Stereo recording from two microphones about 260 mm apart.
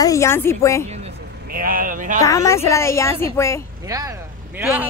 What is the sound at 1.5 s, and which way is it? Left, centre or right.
Speech, right.